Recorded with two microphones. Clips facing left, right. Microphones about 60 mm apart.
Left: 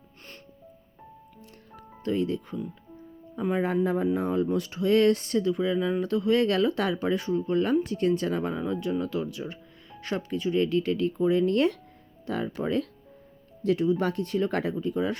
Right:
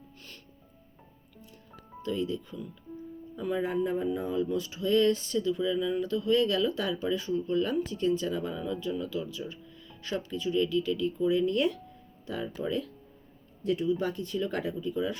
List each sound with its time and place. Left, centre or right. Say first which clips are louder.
2.0 s speech: left 4 dB; left
3.3 s speech: left 4 dB; left
3.6 s speech: left 4 dB; left
13.6 s speech: left 4 dB; left